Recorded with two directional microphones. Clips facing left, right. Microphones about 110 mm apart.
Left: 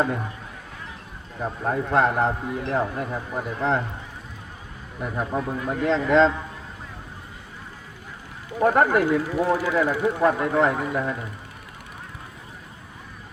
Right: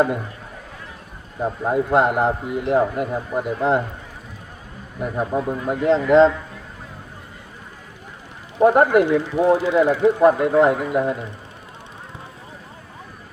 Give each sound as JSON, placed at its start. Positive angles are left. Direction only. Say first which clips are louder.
{"t": 1.4, "sound": "a man's voice", "louder": "right 5 dB", "side_deg": -20}
{"t": 4.9, "sound": "a man's voice", "louder": "right 4 dB", "side_deg": -10}
{"t": 8.5, "sound": "speech", "louder": "right 5 dB", "side_deg": -25}